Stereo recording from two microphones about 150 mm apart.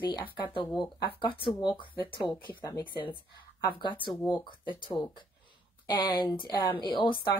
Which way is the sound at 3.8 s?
30° left (ahead or behind).